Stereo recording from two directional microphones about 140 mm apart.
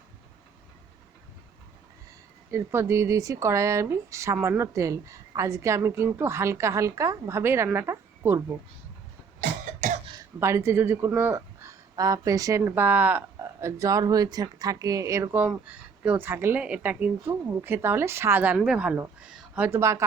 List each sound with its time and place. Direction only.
2.5 s speech: 20° right (ahead or behind)
9.4 s cough: 70° right (ahead or behind)
10.4 s speech: 20° right (ahead or behind)
15.3 s speech: 10° right (ahead or behind)